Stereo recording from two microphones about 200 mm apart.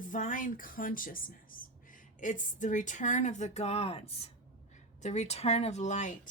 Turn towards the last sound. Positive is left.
turn(degrees=35)  # may be behind; listen again after turning